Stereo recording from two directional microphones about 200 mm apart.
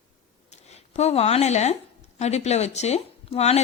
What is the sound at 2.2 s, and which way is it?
Speech, 35° left (ahead or behind).